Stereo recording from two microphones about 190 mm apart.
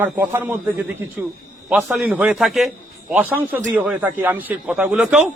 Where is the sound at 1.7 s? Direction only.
5° right (ahead or behind).